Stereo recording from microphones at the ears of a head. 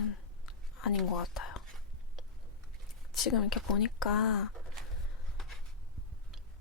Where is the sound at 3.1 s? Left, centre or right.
Left.